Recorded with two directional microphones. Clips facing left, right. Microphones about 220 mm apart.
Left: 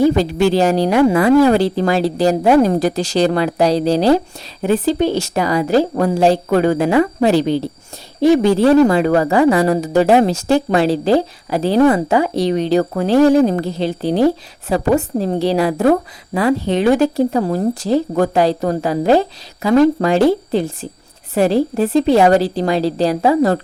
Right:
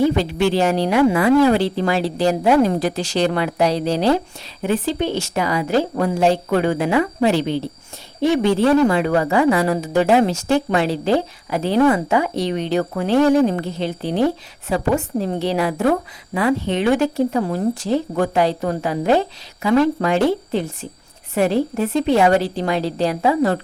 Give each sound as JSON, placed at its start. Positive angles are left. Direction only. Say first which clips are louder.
{"t": 0.0, "sound": "a woman's voice", "louder": "left 4 dB", "side_deg": 40}